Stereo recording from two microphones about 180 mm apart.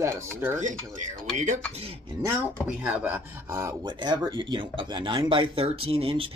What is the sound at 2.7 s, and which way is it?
Speech, 10° right (ahead or behind).